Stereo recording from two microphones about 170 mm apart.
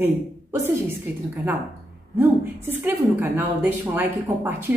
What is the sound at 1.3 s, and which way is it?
A woman's voice, 10° right (ahead or behind).